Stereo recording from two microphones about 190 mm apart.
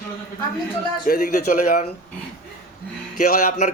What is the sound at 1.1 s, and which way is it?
Speech, 45° left (ahead or behind).